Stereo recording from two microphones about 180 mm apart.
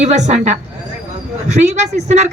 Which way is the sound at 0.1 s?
40° right (ahead or behind).